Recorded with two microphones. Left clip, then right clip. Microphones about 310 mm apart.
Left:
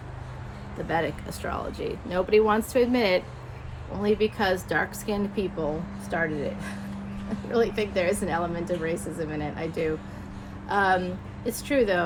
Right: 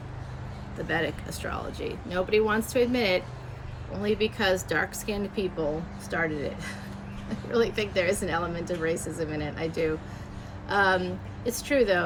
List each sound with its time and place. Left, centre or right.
0.9 s a woman's voice: centre